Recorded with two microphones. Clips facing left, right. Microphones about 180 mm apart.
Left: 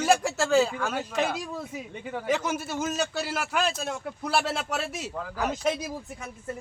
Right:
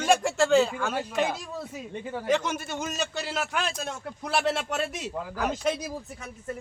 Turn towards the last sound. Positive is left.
turn(degrees=5)  # may be behind; listen again after turning